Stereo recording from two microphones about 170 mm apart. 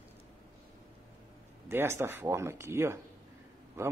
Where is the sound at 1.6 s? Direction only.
15° right (ahead or behind).